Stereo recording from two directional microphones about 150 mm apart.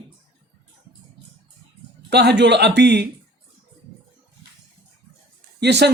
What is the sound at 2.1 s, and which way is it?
Speech, 90° right.